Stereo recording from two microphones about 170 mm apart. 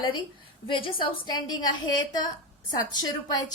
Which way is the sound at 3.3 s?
20° left (ahead or behind).